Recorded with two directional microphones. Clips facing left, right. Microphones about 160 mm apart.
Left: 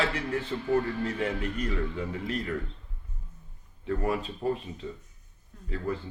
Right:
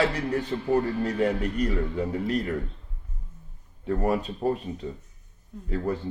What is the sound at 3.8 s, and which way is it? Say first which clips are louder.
Speech: right 4 dB; 40° right (ahead or behind).